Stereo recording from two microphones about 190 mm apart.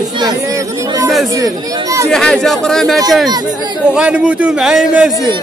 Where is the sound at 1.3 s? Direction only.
20° right (ahead or behind).